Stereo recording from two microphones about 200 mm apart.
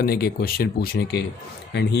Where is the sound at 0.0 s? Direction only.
50° left (ahead or behind).